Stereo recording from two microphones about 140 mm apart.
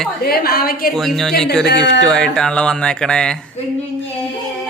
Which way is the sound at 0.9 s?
Centre (ahead or behind).